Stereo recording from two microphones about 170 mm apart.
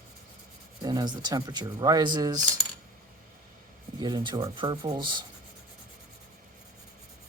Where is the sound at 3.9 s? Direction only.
25° right (ahead or behind).